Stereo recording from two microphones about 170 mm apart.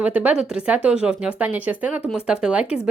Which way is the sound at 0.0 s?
10° right (ahead or behind).